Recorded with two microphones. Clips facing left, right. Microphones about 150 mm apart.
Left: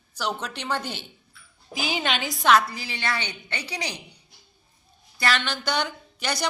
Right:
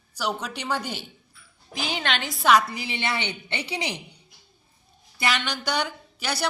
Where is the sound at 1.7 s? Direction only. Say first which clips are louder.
Left 1 dB; 5° left (ahead or behind).